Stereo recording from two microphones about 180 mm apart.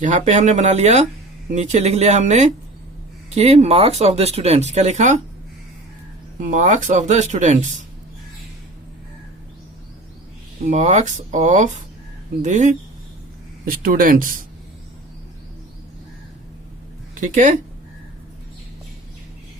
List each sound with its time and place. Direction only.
0.0 s speech: 45° right (ahead or behind)
6.4 s speech: 45° right (ahead or behind)
10.7 s speech: 40° right (ahead or behind)
17.2 s speech: 45° right (ahead or behind)